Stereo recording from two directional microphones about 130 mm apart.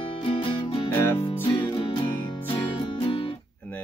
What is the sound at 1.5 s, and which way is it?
Music, 40° left (ahead or behind).